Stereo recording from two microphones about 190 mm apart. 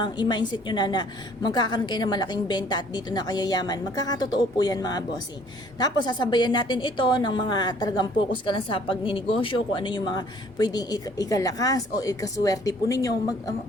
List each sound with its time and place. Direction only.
0.0 s a woman's voice: 25° left (ahead or behind)